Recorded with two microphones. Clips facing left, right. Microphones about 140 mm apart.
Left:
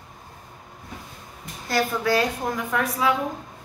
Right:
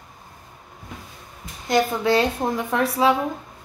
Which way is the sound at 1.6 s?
20° right (ahead or behind).